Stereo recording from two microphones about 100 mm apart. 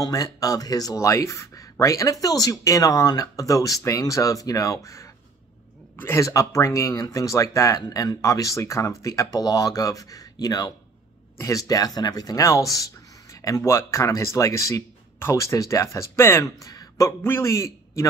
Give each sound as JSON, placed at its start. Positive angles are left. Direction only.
{"t": 0.0, "sound": "speech", "side_deg": 35}
{"t": 16.6, "sound": "a sound", "side_deg": 35}
{"t": 17.2, "sound": "a man's voice", "side_deg": 25}